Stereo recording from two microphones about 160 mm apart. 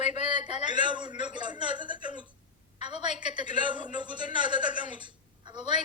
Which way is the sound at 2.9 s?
45° left (ahead or behind).